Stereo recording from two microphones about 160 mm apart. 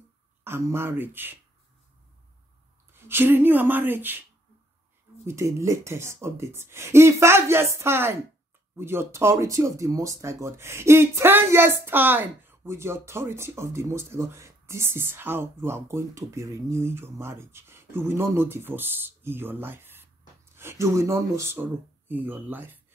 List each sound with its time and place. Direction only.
0.4 s speech: 15° right (ahead or behind)
2.9 s speech: 15° right (ahead or behind)
5.2 s speech: 20° right (ahead or behind)